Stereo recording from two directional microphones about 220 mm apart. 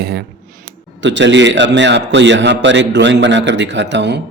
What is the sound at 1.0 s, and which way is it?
A man's voice, 55° right (ahead or behind).